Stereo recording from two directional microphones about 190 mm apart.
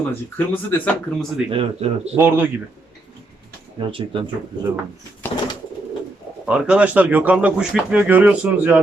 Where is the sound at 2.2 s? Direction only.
10° right (ahead or behind).